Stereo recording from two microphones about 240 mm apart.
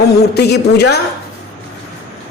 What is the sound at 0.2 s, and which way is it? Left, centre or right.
Speech, left.